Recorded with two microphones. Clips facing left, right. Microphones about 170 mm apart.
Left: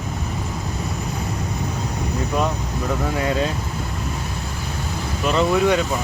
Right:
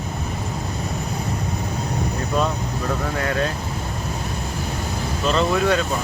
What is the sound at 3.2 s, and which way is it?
Vehicle, 15° left (ahead or behind).